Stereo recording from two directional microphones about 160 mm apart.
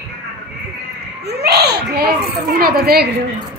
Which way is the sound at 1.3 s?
90° right.